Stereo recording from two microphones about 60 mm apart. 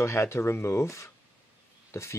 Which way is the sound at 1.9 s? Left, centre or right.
Left.